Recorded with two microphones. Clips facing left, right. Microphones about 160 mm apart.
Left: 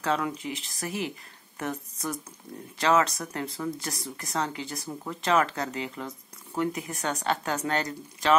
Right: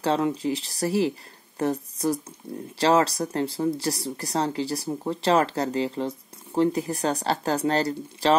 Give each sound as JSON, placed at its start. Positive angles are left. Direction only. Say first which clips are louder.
{"t": 0.0, "sound": "speech", "louder": "right 5 dB", "side_deg": -30}